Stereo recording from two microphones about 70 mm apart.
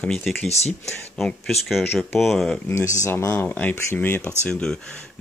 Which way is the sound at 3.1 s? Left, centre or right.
Left.